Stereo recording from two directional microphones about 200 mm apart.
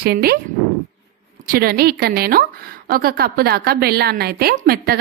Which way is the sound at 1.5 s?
50° right (ahead or behind).